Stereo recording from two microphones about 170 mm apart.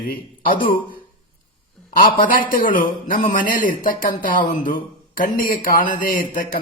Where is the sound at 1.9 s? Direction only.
55° left (ahead or behind).